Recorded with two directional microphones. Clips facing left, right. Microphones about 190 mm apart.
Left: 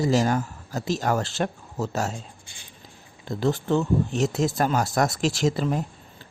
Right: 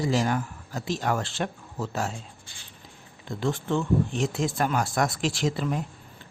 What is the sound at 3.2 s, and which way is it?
Speech, 40° left (ahead or behind).